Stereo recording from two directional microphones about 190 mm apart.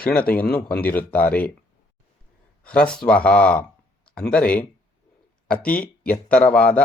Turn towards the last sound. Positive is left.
turn(degrees=5)  # may be behind; listen again after turning